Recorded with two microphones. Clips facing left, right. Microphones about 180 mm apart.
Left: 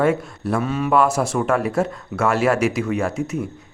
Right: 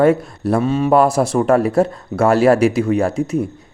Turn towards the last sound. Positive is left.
turn(degrees=-35)  # may be behind; listen again after turning